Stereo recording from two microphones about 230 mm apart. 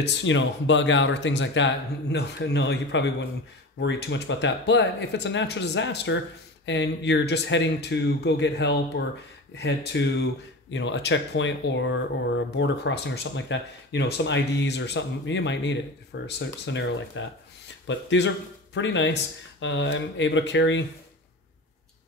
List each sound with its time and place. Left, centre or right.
0.0 s speech: left